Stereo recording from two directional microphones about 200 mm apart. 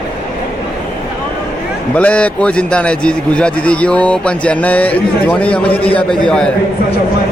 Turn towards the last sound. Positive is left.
turn(degrees=5)  # may be behind; listen again after turning